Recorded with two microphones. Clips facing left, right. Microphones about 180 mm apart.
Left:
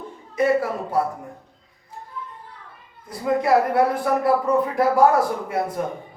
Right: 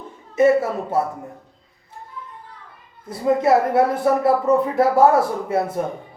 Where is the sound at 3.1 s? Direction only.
25° right (ahead or behind).